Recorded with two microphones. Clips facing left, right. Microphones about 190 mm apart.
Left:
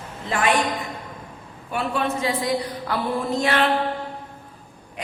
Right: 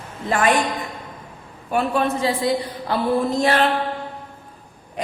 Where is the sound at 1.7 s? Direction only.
35° right (ahead or behind).